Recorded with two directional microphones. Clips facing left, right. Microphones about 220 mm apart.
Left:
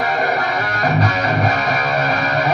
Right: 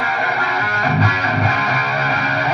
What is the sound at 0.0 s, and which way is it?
Music, 40° left (ahead or behind).